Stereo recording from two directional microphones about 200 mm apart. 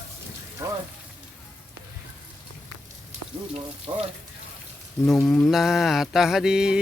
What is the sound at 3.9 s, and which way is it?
Speech, 20° right (ahead or behind).